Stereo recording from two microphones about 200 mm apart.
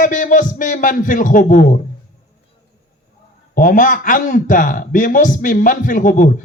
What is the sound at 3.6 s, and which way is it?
A man's voice, 40° left (ahead or behind).